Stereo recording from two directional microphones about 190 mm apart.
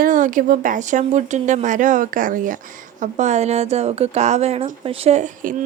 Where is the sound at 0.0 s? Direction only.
45° right (ahead or behind).